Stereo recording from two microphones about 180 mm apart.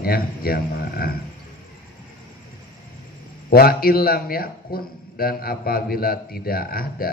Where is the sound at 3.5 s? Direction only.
55° left (ahead or behind).